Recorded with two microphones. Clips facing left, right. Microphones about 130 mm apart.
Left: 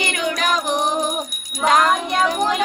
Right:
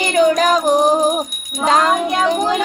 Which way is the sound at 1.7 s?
30° right (ahead or behind).